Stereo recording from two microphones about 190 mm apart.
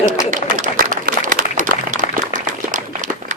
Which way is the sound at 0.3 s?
40° right (ahead or behind).